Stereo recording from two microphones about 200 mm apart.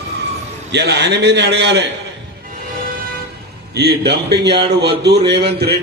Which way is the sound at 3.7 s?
55° right (ahead or behind).